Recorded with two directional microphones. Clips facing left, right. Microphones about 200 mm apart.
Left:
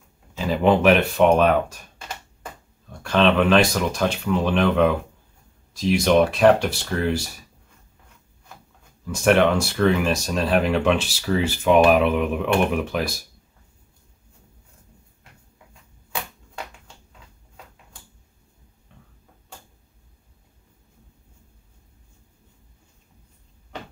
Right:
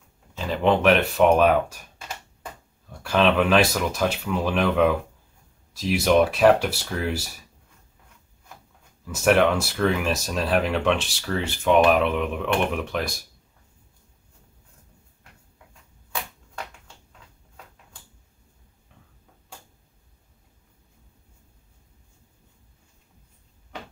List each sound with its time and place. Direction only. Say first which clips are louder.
0.3 s speech: left 3 dB; 5° left (ahead or behind)
2.9 s speech: left 2 dB; 5° right (ahead or behind)
9.0 s speech: left 1 dB; 5° right (ahead or behind)
18.9 s a sound: left 4 dB; 5° right (ahead or behind)